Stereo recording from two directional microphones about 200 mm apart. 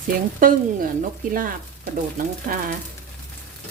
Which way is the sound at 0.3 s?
45° right (ahead or behind).